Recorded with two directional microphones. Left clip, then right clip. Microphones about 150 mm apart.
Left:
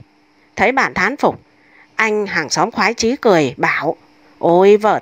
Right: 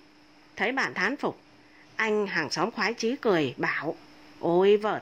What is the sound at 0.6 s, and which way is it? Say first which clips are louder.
A woman's voice: left 13 dB; 45° left (ahead or behind).